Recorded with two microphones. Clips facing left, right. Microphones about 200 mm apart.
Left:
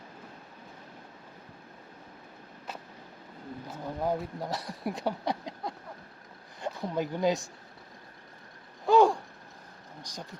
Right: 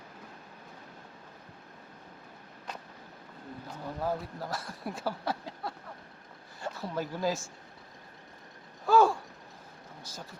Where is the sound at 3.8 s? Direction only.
15° left (ahead or behind).